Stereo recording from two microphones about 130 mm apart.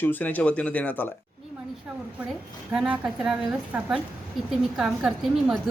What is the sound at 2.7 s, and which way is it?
A woman's voice, 10° right (ahead or behind).